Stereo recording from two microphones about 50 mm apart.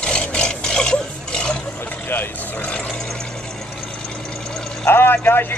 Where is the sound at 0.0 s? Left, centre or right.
Left.